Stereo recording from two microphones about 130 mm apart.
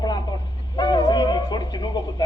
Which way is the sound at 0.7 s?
35° left (ahead or behind).